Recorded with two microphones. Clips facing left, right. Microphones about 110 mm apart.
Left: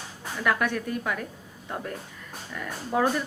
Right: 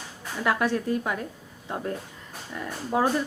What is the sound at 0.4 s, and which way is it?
Speech, 30° right (ahead or behind).